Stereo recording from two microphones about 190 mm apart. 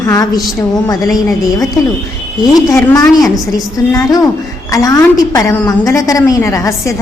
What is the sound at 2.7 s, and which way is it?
A woman's voice, 15° left (ahead or behind).